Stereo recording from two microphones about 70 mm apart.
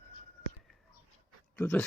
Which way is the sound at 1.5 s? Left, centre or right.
Left.